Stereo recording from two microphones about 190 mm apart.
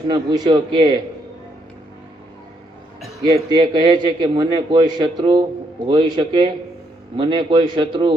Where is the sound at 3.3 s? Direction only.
25° right (ahead or behind).